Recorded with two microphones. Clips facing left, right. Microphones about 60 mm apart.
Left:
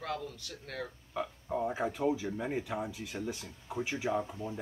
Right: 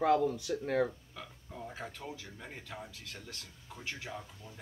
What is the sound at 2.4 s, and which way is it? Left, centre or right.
Speech, centre.